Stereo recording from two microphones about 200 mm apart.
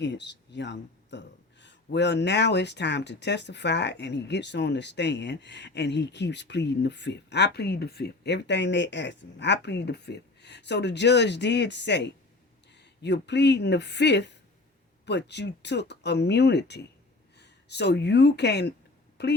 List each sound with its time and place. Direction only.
0.0 s speech: 60° left (ahead or behind)